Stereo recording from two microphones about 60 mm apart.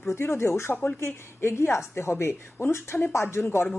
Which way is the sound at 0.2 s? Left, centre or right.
Left.